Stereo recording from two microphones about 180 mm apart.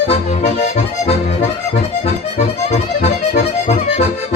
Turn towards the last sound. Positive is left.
turn(degrees=40)  # may be behind; listen again after turning